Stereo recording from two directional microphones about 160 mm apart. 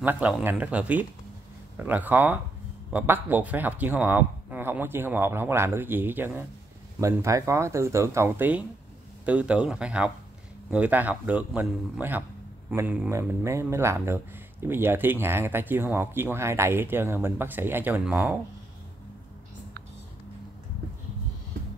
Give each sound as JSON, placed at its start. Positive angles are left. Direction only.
{"t": 0.0, "sound": "a man's voice", "side_deg": -10}